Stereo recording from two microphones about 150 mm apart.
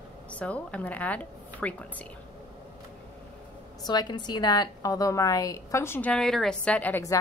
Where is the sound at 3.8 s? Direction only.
30° left (ahead or behind); by 7.0 s 10° left (ahead or behind).